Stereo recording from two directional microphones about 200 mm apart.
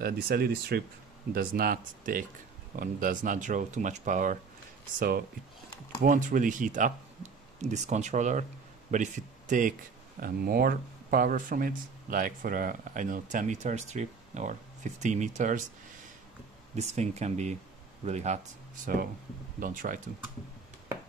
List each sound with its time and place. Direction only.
0.0 s speech: 50° right (ahead or behind)
16.7 s speech: 35° right (ahead or behind)
19.6 s speech: 40° right (ahead or behind)